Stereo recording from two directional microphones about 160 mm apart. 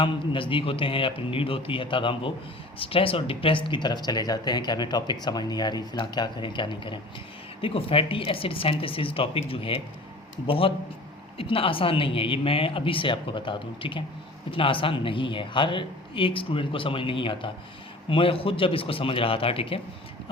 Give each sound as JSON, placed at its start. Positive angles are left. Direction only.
{"t": 0.0, "sound": "speech", "side_deg": 35}